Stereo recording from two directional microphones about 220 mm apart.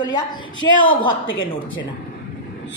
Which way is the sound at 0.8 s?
25° left (ahead or behind).